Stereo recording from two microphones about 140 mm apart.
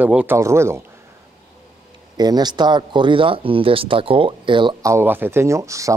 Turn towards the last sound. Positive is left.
turn(degrees=-20)  # may be behind; listen again after turning